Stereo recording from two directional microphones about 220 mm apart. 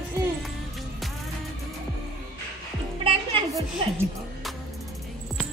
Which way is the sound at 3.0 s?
25° right (ahead or behind).